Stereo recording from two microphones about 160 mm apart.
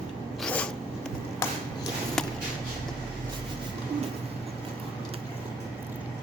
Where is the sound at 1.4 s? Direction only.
15° left (ahead or behind).